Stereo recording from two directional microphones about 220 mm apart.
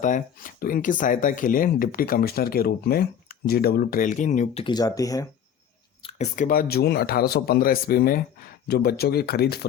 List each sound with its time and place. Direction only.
0.0 s speech: 35° left (ahead or behind)
4.6 s speech: 20° left (ahead or behind)
6.0 s speech: 25° left (ahead or behind); by 9.6 s 45° left (ahead or behind)